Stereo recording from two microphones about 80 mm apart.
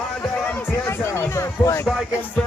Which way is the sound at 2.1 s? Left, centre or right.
Left.